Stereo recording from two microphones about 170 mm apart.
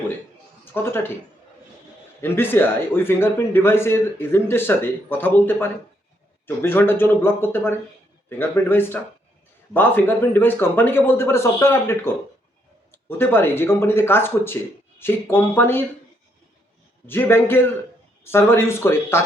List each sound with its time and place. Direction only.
0.6 s speech: 10° left (ahead or behind)
2.2 s a man's voice: 10° left (ahead or behind)
17.1 s a man's voice: 10° left (ahead or behind)